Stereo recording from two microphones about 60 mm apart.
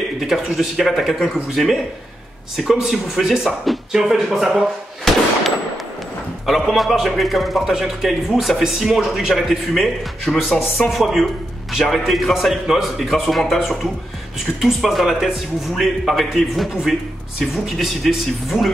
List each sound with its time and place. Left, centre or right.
0.2 s speech: centre
6.4 s speech: centre
10.9 s speech: centre